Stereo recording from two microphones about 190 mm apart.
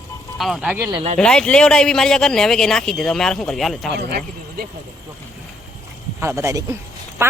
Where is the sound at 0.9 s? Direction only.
30° right (ahead or behind).